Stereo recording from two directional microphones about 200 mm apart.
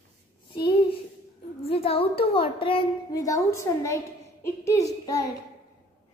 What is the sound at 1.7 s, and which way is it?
A woman's voice, 30° left (ahead or behind).